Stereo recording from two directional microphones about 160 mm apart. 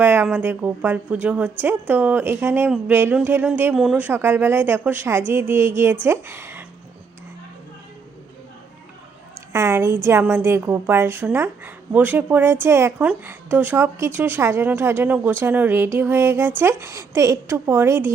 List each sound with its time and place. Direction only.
0.0 s a woman's voice: 15° right (ahead or behind)
9.5 s a woman's voice: 15° right (ahead or behind)